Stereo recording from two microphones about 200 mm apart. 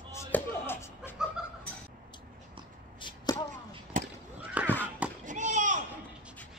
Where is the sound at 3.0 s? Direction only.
25° left (ahead or behind).